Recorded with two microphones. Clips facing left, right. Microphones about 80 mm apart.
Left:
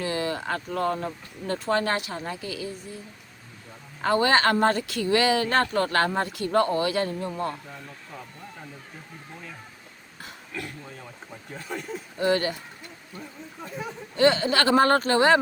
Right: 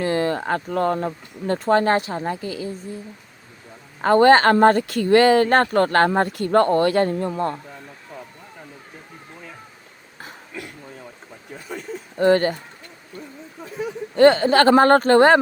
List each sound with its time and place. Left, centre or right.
0.0 s speech: right
4.0 s speech: right
12.2 s speech: right
14.2 s speech: right